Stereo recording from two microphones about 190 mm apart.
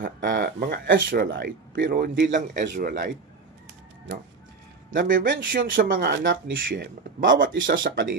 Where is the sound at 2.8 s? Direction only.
45° right (ahead or behind).